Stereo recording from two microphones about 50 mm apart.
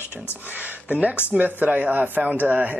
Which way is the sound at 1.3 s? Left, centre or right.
Right.